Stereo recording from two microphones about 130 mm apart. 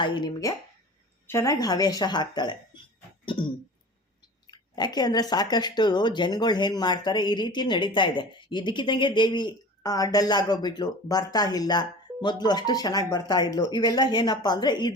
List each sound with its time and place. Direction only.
0.0 s a woman's voice: 35° left (ahead or behind); by 1.5 s 20° left (ahead or behind)
1.5 s speech: 30° left (ahead or behind)
4.5 s speech: 35° left (ahead or behind)